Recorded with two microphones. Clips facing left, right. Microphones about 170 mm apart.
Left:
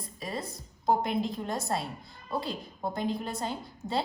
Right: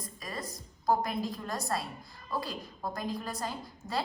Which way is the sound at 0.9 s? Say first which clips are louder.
Left 2 dB; 25° left (ahead or behind).